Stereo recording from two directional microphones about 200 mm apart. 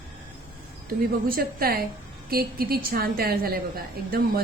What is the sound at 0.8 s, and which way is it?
A woman's voice, 45° right (ahead or behind).